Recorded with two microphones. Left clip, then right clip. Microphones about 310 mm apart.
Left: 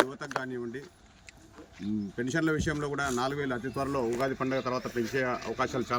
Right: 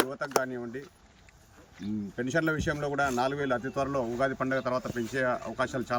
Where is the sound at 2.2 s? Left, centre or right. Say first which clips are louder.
Right 1 dB; centre.